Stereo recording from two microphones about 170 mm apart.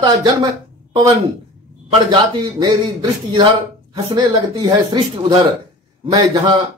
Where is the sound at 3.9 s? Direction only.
25° right (ahead or behind).